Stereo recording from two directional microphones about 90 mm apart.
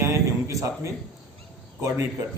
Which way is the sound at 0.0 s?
35° right (ahead or behind).